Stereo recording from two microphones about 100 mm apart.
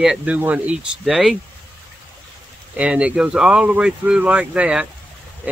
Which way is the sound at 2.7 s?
10° right (ahead or behind).